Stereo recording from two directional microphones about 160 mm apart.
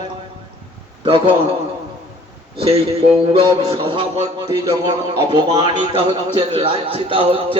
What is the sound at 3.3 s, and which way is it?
A man's voice, 35° right (ahead or behind).